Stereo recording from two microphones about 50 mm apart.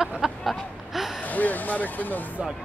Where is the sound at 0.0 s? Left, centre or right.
Centre.